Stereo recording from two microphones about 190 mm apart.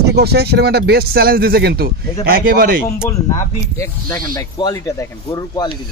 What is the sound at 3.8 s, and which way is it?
Speech, 15° left (ahead or behind).